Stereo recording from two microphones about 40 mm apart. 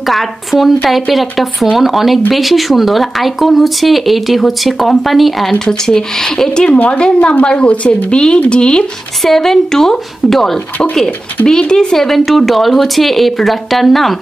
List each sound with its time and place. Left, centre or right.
0.0 s speech: centre
5.5 s speech: centre
6.9 s speech: left
9.2 s speech: centre
11.4 s speech: centre